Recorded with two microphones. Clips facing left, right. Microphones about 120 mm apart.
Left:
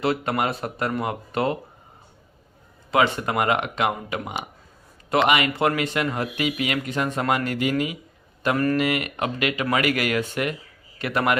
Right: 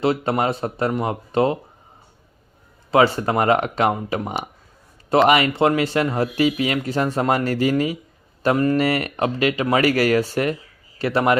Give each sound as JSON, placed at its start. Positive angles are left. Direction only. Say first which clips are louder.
{"t": 0.0, "sound": "speech", "louder": "right 4 dB", "side_deg": -30}
{"t": 2.9, "sound": "speech", "louder": "right 4 dB", "side_deg": -35}
{"t": 8.4, "sound": "speech", "louder": "right 4 dB", "side_deg": -25}
{"t": 8.7, "sound": "speech", "louder": "right 3 dB", "side_deg": -35}